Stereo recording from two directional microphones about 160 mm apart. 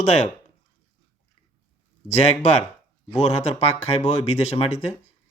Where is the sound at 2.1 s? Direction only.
45° left (ahead or behind).